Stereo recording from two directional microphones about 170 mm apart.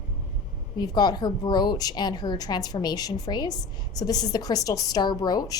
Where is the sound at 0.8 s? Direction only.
25° left (ahead or behind).